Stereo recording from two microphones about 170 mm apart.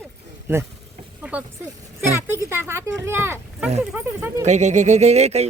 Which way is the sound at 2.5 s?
15° right (ahead or behind).